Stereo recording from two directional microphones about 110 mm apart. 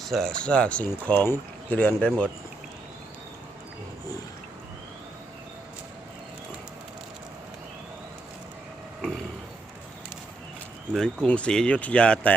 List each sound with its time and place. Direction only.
0.0 s speech: 5° left (ahead or behind)
10.9 s speech: 5° left (ahead or behind)